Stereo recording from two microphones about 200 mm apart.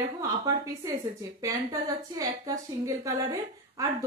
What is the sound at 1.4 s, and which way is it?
Speech, 15° right (ahead or behind).